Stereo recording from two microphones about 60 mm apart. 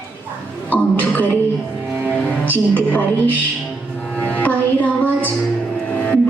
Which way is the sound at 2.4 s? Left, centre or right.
Left.